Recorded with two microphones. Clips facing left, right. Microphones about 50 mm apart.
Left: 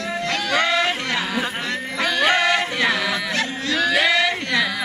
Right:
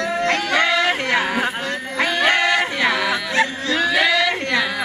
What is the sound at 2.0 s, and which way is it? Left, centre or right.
Music, right.